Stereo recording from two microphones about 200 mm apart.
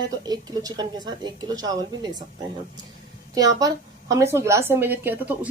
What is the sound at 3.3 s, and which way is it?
A woman's voice, 20° right (ahead or behind).